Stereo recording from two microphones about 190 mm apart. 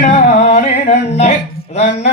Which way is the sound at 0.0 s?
40° left (ahead or behind).